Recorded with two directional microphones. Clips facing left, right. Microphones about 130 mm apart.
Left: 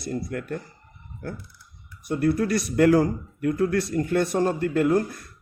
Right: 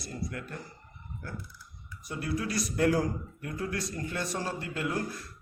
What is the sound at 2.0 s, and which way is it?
Speech, 60° left (ahead or behind).